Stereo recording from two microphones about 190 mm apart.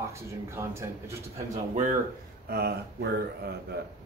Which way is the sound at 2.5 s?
55° right (ahead or behind).